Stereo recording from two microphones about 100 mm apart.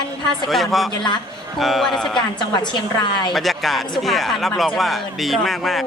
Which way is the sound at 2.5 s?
45° left (ahead or behind).